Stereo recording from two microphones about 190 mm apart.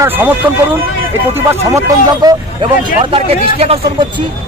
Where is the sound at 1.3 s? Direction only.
15° right (ahead or behind).